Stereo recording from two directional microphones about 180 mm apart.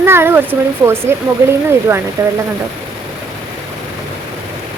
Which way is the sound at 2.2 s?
15° right (ahead or behind).